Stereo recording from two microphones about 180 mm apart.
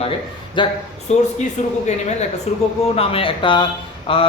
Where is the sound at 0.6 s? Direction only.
25° left (ahead or behind).